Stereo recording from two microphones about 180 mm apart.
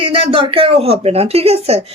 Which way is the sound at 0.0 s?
30° right (ahead or behind).